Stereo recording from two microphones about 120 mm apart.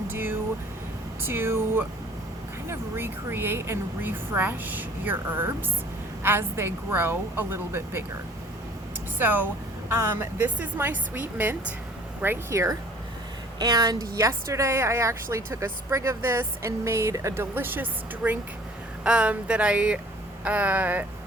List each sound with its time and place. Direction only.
0.1 s air conditioning: 15° right (ahead or behind)
1.3 s a woman's voice: 20° right (ahead or behind)
9.1 s a woman's voice: 15° right (ahead or behind)
10.3 s a woman's voice: 15° right (ahead or behind)